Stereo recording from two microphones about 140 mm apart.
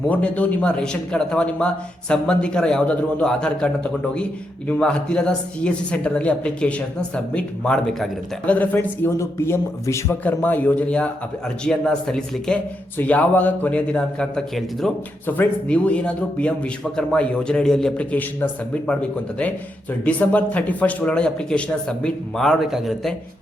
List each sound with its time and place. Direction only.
0.1 s a man's voice: 10° left (ahead or behind)
4.8 s a man's voice: 5° left (ahead or behind)
20.1 s a man's voice: 10° left (ahead or behind)